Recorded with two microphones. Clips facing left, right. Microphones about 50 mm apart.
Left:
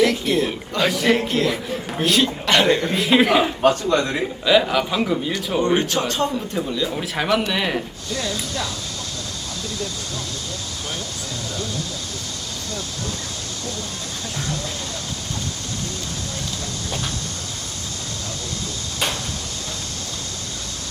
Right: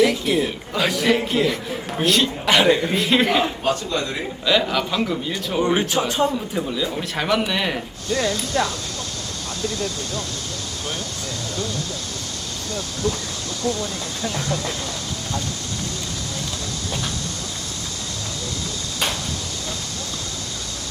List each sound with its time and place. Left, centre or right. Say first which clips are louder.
0.0 s a man's voice: even; centre
3.6 s a man's voice: left 5 dB; left
4.4 s a man's voice: left 2 dB; centre
5.5 s a man's voice: even; centre
8.1 s speech: right 5 dB; right
9.6 s speech: right 4 dB; right
14.3 s speech: right 2 dB; right